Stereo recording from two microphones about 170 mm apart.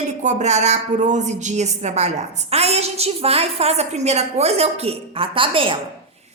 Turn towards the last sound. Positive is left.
turn(degrees=-30)  # may be behind; listen again after turning